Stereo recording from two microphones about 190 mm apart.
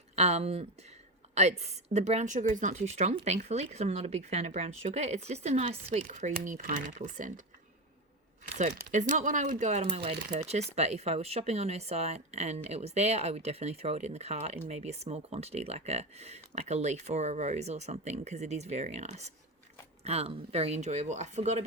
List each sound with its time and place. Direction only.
0.2 s speech: 35° right (ahead or behind)
8.5 s speech: 40° right (ahead or behind)